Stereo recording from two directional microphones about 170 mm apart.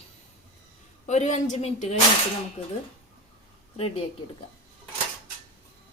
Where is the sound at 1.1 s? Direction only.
45° left (ahead or behind).